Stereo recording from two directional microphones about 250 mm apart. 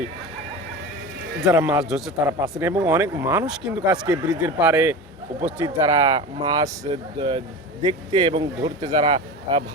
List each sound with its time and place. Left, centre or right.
1.4 s a man's voice: centre